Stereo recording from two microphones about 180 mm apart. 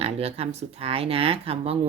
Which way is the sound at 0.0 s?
35° right (ahead or behind).